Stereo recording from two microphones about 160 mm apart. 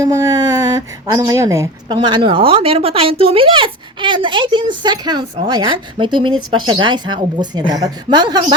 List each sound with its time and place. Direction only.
0.0 s speech: 20° right (ahead or behind)